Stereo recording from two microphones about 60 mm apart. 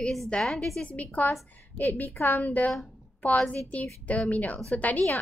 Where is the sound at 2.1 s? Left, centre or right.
Left.